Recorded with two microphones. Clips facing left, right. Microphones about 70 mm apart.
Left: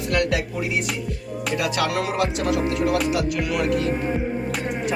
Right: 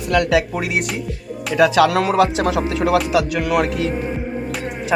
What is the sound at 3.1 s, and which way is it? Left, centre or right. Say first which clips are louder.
Speech: right 5 dB; right.